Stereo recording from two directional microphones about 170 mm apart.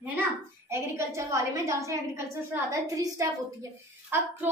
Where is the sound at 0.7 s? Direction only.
15° right (ahead or behind).